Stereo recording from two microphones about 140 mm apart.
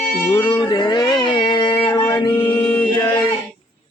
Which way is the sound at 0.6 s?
30° left (ahead or behind).